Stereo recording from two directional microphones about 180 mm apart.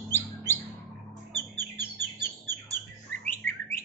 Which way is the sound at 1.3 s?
10° left (ahead or behind).